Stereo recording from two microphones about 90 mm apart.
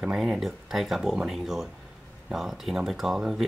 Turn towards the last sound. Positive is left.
turn(degrees=-5)  # may be behind; listen again after turning